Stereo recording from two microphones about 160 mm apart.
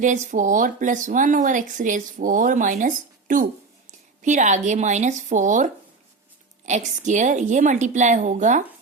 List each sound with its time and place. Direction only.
0.0 s speech: 50° right (ahead or behind)